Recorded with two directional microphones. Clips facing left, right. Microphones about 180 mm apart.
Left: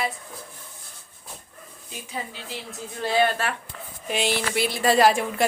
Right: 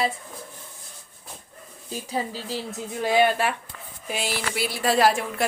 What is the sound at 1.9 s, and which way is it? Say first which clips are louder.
Speech: right 6 dB; 35° right (ahead or behind).